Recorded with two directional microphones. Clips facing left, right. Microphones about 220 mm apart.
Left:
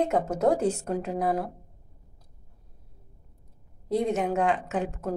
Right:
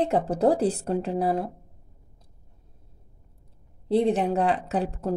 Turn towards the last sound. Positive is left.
turn(degrees=-35)  # may be behind; listen again after turning